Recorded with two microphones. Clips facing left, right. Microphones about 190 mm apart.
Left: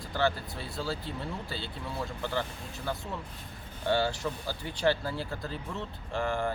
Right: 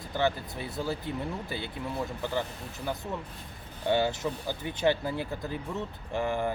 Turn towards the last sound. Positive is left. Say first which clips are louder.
# right 1 dB
turn(degrees=-20)  # may be behind; listen again after turning